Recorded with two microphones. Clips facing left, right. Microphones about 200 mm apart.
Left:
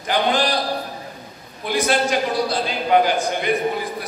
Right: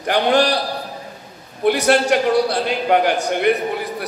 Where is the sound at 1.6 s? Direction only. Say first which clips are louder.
Right 5 dB; 65° right (ahead or behind).